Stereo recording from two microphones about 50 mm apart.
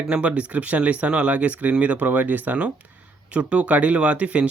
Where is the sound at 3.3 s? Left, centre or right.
Right.